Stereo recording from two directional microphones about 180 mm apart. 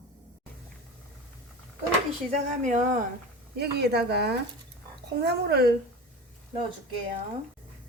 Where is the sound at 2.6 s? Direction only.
45° right (ahead or behind).